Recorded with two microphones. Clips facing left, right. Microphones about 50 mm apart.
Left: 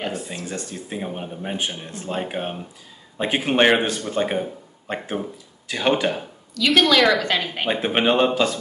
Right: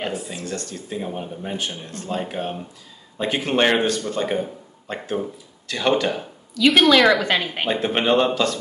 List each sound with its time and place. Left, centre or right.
0.3 s speech: centre
6.5 s a woman's voice: centre
7.6 s speech: centre